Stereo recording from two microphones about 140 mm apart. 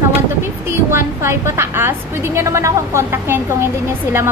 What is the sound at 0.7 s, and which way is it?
A woman's voice, 20° right (ahead or behind).